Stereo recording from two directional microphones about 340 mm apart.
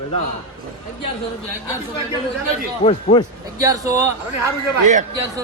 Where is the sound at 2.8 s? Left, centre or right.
Centre.